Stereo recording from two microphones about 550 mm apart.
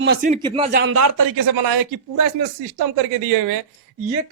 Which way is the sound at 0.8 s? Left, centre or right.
Right.